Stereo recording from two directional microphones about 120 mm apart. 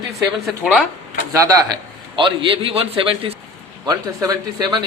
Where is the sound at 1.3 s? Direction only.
30° right (ahead or behind).